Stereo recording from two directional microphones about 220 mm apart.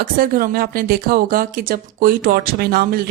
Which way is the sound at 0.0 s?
40° right (ahead or behind).